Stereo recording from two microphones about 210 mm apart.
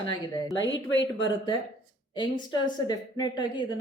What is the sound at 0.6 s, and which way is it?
Speech, 60° left (ahead or behind).